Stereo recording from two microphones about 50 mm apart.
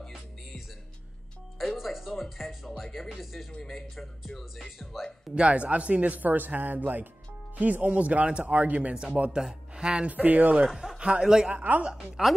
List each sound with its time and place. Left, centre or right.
1.6 s speech: centre
5.3 s speech: right
9.3 s speech: centre
10.0 s speech: right
10.7 s a man's voice: centre
11.0 s a man's voice: centre
11.5 s speech: right
11.9 s a man's voice: centre